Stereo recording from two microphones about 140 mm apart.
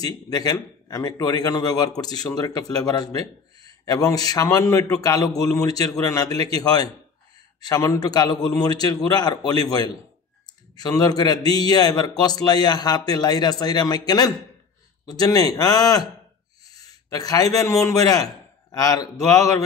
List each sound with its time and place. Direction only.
0.0 s a man's voice: 25° left (ahead or behind)